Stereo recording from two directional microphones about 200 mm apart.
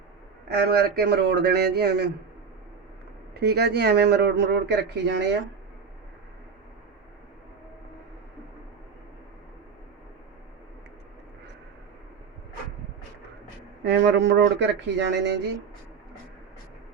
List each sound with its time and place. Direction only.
0.4 s speech: 55° right (ahead or behind)
3.3 s speech: 55° right (ahead or behind)
13.8 s speech: 60° right (ahead or behind)